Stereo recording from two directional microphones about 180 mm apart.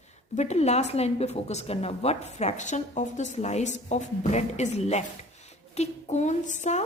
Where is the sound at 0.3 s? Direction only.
40° left (ahead or behind).